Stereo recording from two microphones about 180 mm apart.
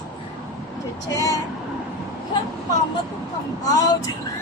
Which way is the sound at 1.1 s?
20° left (ahead or behind).